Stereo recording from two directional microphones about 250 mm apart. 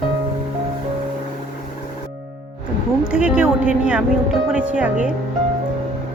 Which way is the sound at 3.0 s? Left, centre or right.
Centre.